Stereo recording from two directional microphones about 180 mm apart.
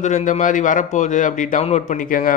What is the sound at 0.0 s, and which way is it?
Speech, 45° left (ahead or behind).